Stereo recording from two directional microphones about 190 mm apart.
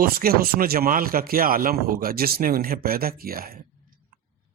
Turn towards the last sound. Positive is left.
turn(degrees=-50)  # may be behind; listen again after turning